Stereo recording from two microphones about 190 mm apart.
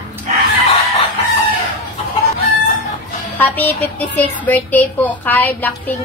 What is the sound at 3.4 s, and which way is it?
Speech, 10° left (ahead or behind).